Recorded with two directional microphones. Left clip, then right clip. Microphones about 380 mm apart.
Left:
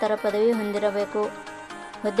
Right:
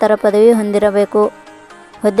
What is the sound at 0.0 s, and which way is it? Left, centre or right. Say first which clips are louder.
Speech: right 12 dB; centre.